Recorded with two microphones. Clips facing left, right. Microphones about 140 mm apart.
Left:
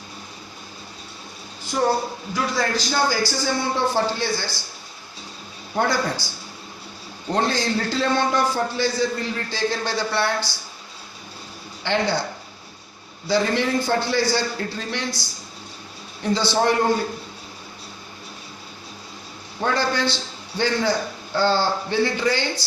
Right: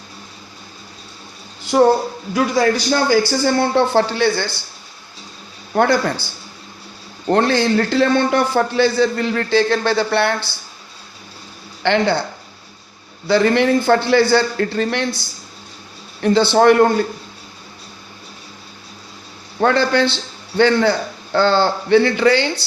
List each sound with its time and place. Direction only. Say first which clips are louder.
2.3 s a man's voice: right 8 dB; 65° right (ahead or behind)
5.7 s a man's voice: right 6 dB; 60° right (ahead or behind)
7.3 s a man's voice: right 7 dB; 65° right (ahead or behind)
11.8 s a man's voice: right 6 dB; 65° right (ahead or behind)
13.2 s a man's voice: right 7 dB; 65° right (ahead or behind)
16.2 s a man's voice: right 8 dB; 60° right (ahead or behind)
19.6 s a man's voice: right 7 dB; 70° right (ahead or behind)